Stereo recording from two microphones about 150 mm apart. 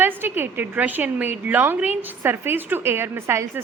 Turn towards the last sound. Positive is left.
turn(degrees=-15)  # may be behind; listen again after turning